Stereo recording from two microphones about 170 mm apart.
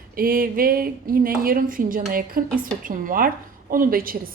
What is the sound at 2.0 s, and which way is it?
Speech, 70° right (ahead or behind).